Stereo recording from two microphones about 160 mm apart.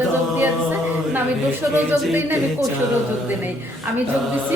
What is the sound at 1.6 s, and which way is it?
Speech, 15° right (ahead or behind).